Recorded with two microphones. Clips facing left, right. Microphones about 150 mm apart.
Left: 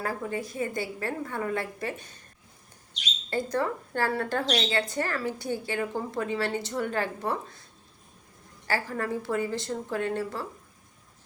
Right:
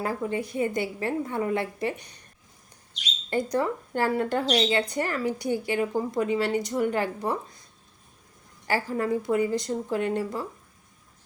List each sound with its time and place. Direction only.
0.0 s a woman's voice: 20° right (ahead or behind)
3.2 s a woman's voice: 20° right (ahead or behind)
8.6 s a woman's voice: 15° right (ahead or behind)